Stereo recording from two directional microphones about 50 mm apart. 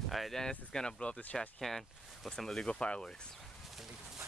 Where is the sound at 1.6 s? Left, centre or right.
Centre.